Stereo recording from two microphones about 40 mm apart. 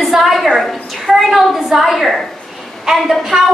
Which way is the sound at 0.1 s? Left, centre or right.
Centre.